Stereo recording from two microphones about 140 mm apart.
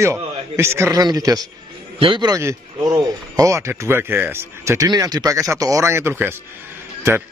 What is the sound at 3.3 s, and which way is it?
A man's voice, 20° right (ahead or behind).